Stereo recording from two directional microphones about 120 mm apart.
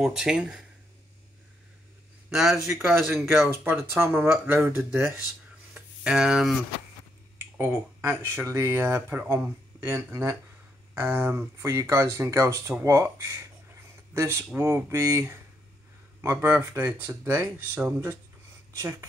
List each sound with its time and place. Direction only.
0.0 s speech: 5° right (ahead or behind)
2.2 s a sound: 5° right (ahead or behind)
2.7 s speech: 20° right (ahead or behind)
3.0 s speech: centre (ahead or behind)
4.0 s speech: 15° right (ahead or behind)
5.8 s a sound: 5° right (ahead or behind)
7.3 s speech: 20° right (ahead or behind)